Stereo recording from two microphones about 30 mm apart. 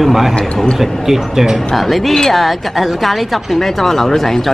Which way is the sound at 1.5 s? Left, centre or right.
Centre.